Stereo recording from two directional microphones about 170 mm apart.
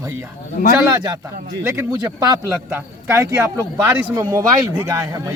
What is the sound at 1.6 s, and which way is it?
Speech, 20° right (ahead or behind).